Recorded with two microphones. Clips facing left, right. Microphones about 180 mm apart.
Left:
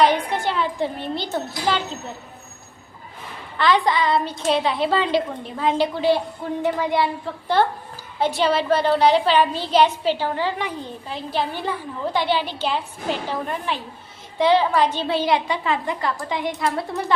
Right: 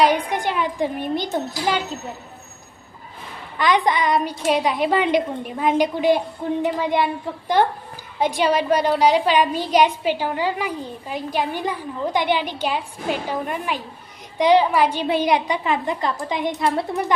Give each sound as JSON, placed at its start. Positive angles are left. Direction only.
{"t": 0.0, "sound": "a woman's voice", "side_deg": -15}
{"t": 3.6, "sound": "a woman's voice", "side_deg": -15}